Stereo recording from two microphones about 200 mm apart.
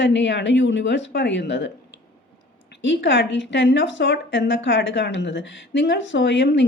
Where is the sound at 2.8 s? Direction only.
65° left (ahead or behind).